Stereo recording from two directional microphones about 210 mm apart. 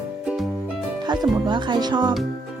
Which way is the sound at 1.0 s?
20° right (ahead or behind).